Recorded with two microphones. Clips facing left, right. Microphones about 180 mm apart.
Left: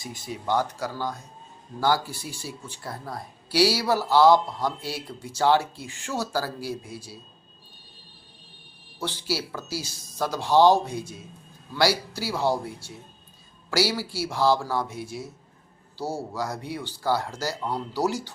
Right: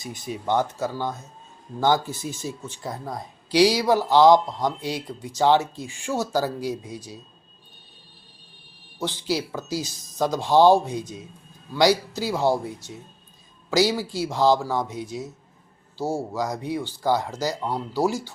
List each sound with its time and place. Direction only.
0.0 s speech: 20° right (ahead or behind)
9.2 s a woman's voice: 15° right (ahead or behind)